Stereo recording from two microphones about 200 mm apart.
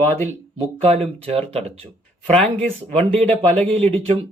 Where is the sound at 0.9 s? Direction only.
30° right (ahead or behind).